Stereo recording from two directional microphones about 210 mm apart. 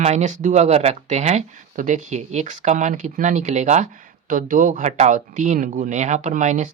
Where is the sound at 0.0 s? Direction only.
30° right (ahead or behind).